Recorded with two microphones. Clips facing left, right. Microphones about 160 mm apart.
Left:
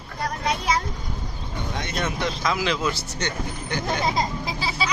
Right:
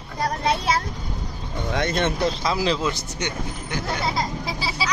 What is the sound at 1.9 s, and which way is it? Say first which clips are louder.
Speech: right 4 dB; 30° right (ahead or behind).